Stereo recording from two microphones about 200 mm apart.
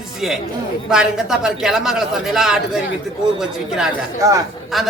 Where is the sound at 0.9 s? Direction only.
5° right (ahead or behind).